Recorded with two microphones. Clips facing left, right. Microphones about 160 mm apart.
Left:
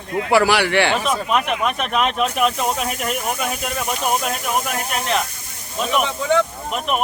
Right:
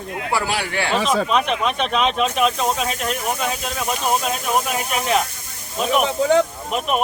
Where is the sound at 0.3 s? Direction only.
75° left (ahead or behind).